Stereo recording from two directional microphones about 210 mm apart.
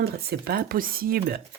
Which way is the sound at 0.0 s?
50° right (ahead or behind).